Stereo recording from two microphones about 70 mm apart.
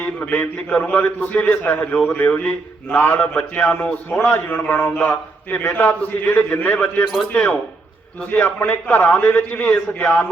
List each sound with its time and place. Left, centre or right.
0.0 s a man's voice: left
4.3 s a man's voice: left
8.2 s a man's voice: left